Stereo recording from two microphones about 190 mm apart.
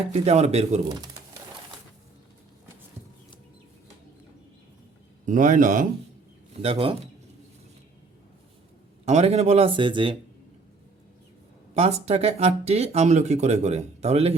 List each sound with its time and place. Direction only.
0.1 s speech: 35° right (ahead or behind)
0.9 s pigeon: 20° right (ahead or behind)
5.2 s speech: 45° right (ahead or behind)
6.5 s speech: 30° right (ahead or behind)
9.0 s speech: 35° right (ahead or behind)
11.7 s speech: 35° right (ahead or behind)